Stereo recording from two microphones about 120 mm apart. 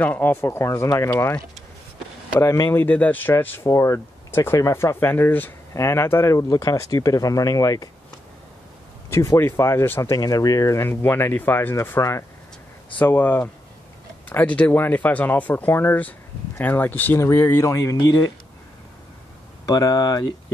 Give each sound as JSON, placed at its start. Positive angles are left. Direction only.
{"t": 0.0, "sound": "speech", "side_deg": 15}
{"t": 2.4, "sound": "speech", "side_deg": 25}
{"t": 9.1, "sound": "speech", "side_deg": 25}
{"t": 10.1, "sound": "speech", "side_deg": 30}
{"t": 19.6, "sound": "speech", "side_deg": 30}